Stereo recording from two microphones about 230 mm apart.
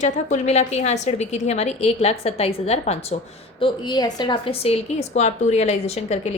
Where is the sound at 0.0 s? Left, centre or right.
Left.